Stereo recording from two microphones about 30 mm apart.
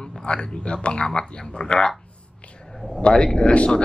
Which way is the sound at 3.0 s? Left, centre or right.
Left.